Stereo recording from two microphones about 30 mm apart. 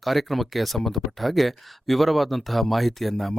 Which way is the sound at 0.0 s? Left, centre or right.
Centre.